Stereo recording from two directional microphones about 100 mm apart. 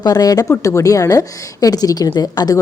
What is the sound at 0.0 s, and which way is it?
A woman's voice, 40° left (ahead or behind).